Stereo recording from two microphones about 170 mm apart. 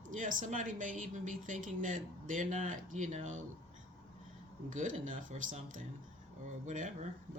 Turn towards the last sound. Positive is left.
turn(degrees=-45)  # may be behind; listen again after turning